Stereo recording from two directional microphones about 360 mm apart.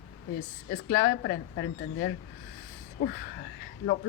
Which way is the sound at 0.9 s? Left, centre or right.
Left.